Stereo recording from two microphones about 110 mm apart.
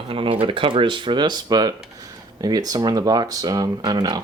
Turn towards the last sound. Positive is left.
turn(degrees=-40)  # may be behind; listen again after turning